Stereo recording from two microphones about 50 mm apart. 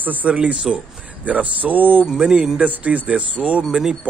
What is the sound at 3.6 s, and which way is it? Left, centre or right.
Speech, centre.